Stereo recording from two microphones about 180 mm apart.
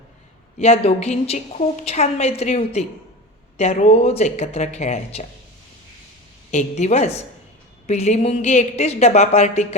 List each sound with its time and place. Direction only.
0.6 s a woman's voice: 35° left (ahead or behind)
6.5 s a woman's voice: 40° left (ahead or behind)